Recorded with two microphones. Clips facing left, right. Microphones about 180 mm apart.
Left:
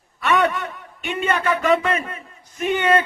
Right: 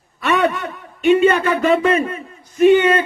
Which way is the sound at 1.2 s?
30° right (ahead or behind).